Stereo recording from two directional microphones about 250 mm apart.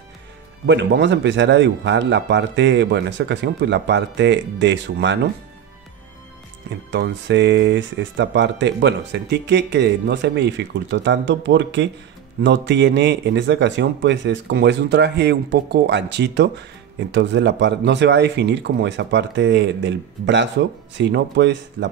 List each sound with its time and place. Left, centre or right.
0.7 s speech: right
6.9 s speech: right